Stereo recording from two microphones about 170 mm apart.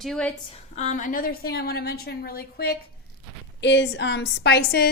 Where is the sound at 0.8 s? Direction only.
45° left (ahead or behind); by 2.7 s 65° left (ahead or behind).